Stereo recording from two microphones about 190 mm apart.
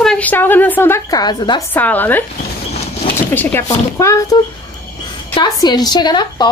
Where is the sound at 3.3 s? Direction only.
10° left (ahead or behind).